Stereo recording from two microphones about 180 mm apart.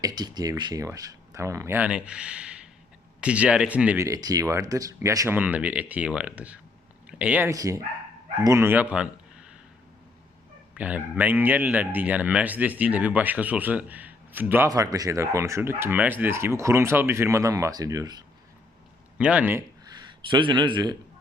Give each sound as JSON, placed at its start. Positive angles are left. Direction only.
{"t": 0.0, "sound": "speech", "side_deg": -20}
{"t": 7.5, "sound": "a man's voice", "side_deg": -20}
{"t": 10.8, "sound": "speech", "side_deg": -10}
{"t": 19.2, "sound": "speech", "side_deg": -5}
{"t": 20.3, "sound": "a man's voice", "side_deg": -25}